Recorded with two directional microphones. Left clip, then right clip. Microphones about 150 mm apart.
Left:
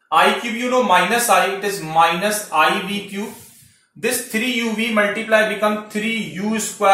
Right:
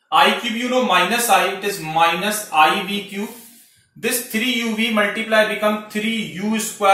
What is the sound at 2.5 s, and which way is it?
Speech, 30° left (ahead or behind).